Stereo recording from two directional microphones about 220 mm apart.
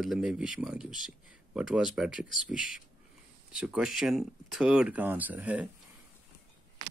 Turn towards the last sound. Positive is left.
turn(degrees=-5)  # may be behind; listen again after turning